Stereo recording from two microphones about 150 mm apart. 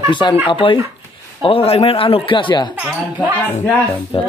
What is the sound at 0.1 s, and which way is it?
A man's voice, 30° left (ahead or behind).